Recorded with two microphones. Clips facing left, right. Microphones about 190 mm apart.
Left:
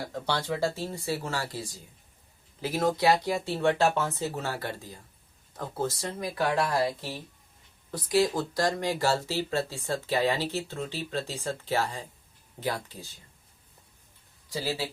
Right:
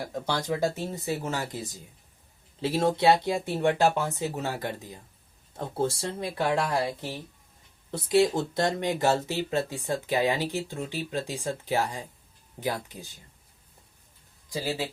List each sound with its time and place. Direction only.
0.0 s speech: 15° right (ahead or behind)
5.5 s speech: 30° right (ahead or behind)
14.5 s speech: 15° right (ahead or behind)